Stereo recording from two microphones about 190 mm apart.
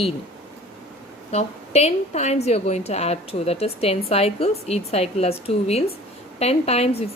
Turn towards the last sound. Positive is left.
turn(degrees=30)  # may be behind; listen again after turning